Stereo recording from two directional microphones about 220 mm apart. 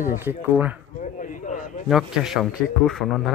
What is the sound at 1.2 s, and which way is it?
Speech, 35° left (ahead or behind).